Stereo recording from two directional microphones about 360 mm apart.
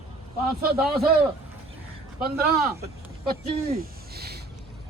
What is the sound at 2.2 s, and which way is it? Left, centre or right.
Speech, right.